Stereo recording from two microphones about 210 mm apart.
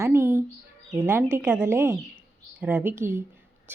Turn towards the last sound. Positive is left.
turn(degrees=-10)  # may be behind; listen again after turning